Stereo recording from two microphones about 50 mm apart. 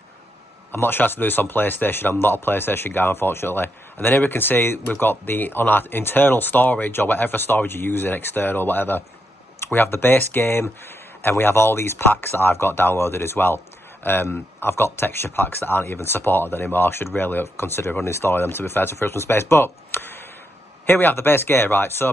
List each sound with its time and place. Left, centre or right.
0.7 s speech: left
18.3 s speech: left